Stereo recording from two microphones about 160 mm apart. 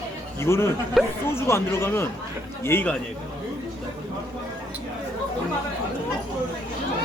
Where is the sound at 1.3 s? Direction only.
15° left (ahead or behind).